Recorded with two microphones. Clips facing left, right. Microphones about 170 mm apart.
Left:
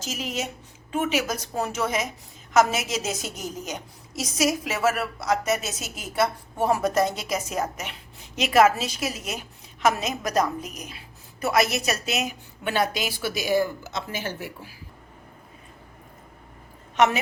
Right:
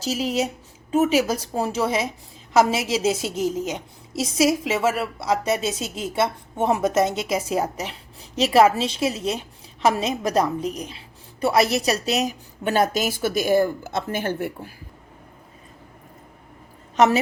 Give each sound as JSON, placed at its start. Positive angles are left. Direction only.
{"t": 0.0, "sound": "a woman's voice", "side_deg": -35}